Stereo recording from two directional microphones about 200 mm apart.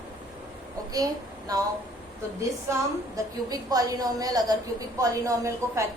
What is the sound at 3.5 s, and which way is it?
A woman's voice, 20° right (ahead or behind).